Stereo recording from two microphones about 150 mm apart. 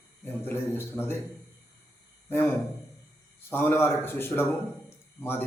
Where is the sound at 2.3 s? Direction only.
15° left (ahead or behind).